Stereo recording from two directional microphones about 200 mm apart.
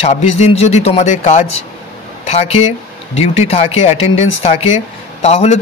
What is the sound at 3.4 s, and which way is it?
Speech, 30° left (ahead or behind).